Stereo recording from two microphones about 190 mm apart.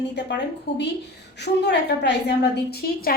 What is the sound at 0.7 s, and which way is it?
A woman's voice, 65° left (ahead or behind).